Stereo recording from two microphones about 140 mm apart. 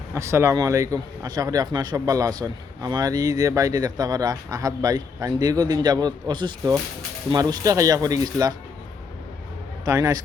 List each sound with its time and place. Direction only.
0.1 s speech: 20° right (ahead or behind)
9.8 s speech: 20° right (ahead or behind)